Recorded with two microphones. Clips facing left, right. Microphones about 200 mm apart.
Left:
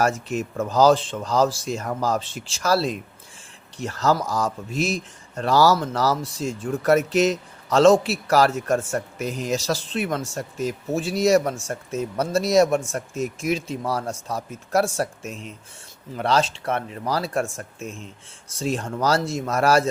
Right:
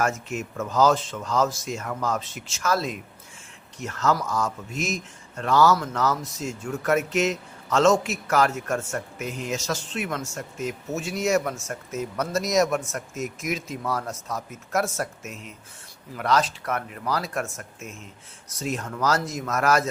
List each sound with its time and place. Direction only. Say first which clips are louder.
0.0 s a man's voice: left 4 dB; 35° left (ahead or behind)